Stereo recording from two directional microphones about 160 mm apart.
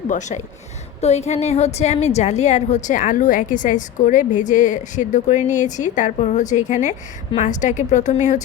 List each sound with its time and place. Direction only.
0.1 s a woman's voice: 50° left (ahead or behind)